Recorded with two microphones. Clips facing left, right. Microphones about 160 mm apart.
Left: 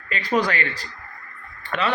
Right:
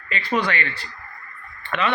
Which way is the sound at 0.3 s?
40° left (ahead or behind).